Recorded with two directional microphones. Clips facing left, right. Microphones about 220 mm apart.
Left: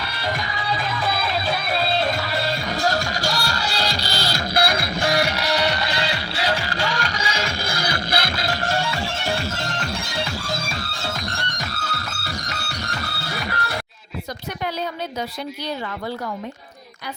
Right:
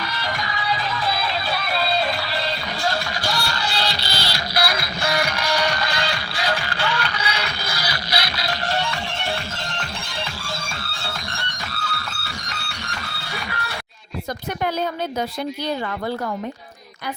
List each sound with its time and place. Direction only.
2.0 s music: 45° left (ahead or behind)
5.2 s music: 20° left (ahead or behind)
6.7 s music: 40° left (ahead or behind)